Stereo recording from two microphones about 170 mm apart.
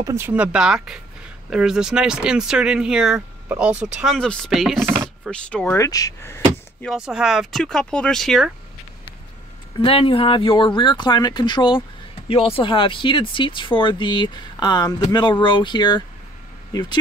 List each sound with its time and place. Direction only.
0.0 s speech: 15° right (ahead or behind); by 5.8 s 5° left (ahead or behind)
5.8 s speech: 20° left (ahead or behind)
6.9 s speech: 5° right (ahead or behind)
9.8 s speech: 30° left (ahead or behind)